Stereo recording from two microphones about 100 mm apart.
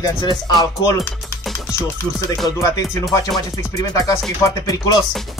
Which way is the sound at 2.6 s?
35° left (ahead or behind).